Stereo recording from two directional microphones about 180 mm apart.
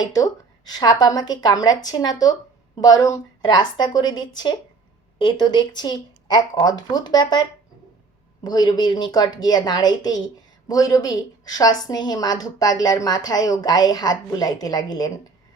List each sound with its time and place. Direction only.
0.0 s a woman's voice: 20° left (ahead or behind)
8.4 s a woman's voice: 20° left (ahead or behind)